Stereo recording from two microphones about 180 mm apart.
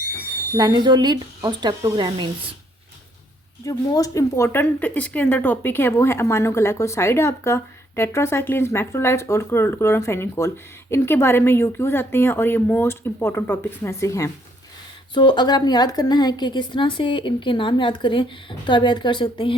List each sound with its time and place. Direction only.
0.5 s speech: 20° right (ahead or behind)
3.7 s a woman's voice: 20° left (ahead or behind)